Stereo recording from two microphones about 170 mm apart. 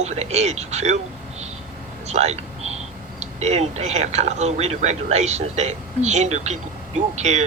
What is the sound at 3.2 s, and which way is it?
Speech, 40° right (ahead or behind).